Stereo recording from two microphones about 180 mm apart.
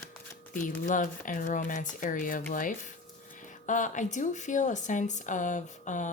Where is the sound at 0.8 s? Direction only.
45° left (ahead or behind).